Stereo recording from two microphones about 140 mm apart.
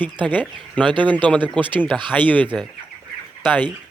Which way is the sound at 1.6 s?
10° left (ahead or behind).